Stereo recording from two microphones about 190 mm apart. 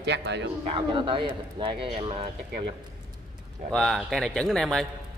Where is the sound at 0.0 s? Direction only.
65° right (ahead or behind).